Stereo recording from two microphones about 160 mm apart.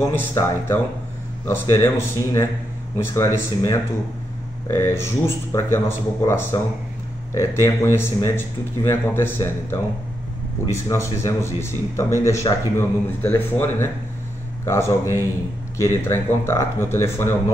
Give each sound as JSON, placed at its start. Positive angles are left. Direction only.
{"t": 0.0, "sound": "a man's voice", "side_deg": 15}